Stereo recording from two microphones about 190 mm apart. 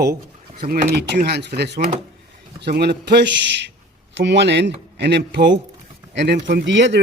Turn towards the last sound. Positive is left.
turn(degrees=-70)  # may be behind; listen again after turning